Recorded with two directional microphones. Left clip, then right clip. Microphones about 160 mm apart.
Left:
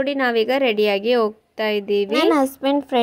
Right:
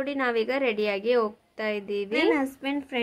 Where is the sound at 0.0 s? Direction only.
30° left (ahead or behind).